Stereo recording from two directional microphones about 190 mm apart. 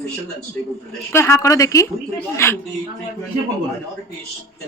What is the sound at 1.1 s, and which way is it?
A woman's voice, 15° left (ahead or behind).